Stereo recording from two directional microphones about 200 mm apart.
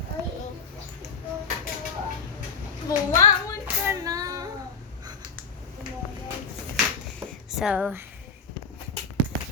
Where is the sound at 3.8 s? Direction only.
15° right (ahead or behind).